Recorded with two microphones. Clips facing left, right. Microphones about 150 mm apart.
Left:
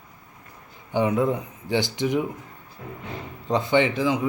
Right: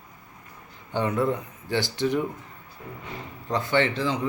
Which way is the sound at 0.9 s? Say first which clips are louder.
Left 3 dB; 15° left (ahead or behind).